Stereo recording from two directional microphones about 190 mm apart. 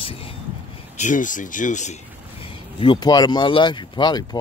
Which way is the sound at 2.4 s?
25° left (ahead or behind).